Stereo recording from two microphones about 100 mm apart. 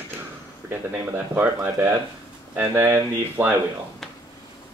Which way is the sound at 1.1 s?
20° right (ahead or behind).